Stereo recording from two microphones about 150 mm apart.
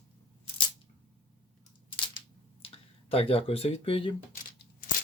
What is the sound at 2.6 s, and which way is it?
Speech, 40° left (ahead or behind).